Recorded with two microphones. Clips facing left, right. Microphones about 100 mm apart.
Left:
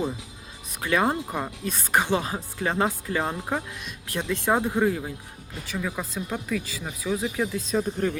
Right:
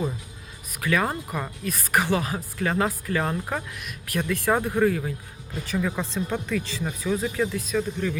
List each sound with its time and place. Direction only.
0.8 s speech: 25° left (ahead or behind)
5.6 s speech: centre (ahead or behind)
7.9 s speech: 40° left (ahead or behind)